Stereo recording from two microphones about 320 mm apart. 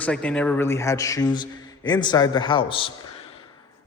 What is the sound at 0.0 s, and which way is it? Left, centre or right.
A man's voice, centre.